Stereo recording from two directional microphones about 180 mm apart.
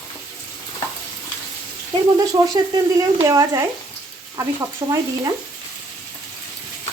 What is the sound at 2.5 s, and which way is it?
Speech, 20° right (ahead or behind).